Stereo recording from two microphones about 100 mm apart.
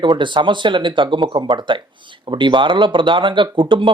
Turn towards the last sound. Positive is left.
turn(degrees=-55)  # may be behind; listen again after turning